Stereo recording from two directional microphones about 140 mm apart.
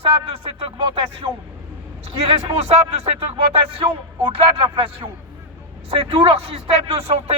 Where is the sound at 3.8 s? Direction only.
40° right (ahead or behind).